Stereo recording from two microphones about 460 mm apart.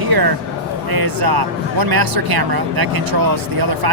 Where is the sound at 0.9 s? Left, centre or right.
Right.